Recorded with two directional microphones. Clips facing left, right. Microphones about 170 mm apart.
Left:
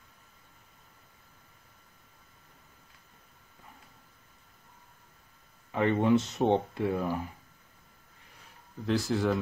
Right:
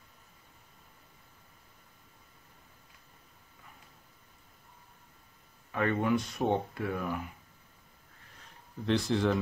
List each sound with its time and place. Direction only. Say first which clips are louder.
5.7 s speech: left 4 dB; 20° left (ahead or behind)
8.8 s speech: even; centre (ahead or behind)